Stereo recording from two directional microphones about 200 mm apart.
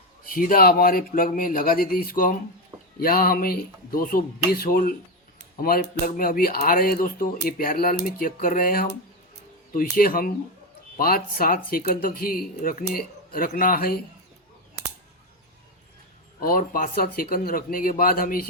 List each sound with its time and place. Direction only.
0.3 s speech: 45° left (ahead or behind)
16.4 s speech: 45° left (ahead or behind)